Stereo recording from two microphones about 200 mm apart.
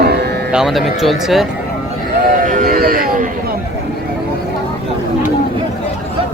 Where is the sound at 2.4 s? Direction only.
40° right (ahead or behind).